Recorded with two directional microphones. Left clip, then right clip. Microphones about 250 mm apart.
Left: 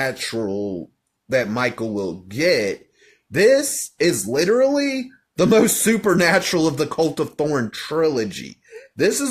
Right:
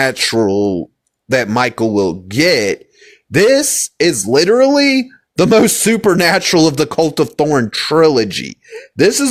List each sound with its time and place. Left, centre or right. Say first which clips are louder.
0.0 s a man's voice: right 10 dB; right